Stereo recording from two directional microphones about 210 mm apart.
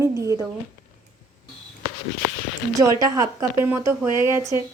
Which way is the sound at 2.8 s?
15° right (ahead or behind).